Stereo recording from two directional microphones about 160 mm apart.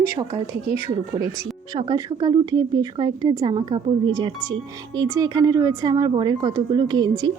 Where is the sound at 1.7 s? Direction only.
30° right (ahead or behind).